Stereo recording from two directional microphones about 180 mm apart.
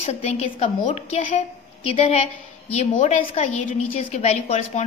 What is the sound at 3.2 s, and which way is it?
A woman's voice, 35° left (ahead or behind).